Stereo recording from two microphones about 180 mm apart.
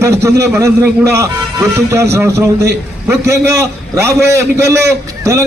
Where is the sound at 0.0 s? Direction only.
15° right (ahead or behind).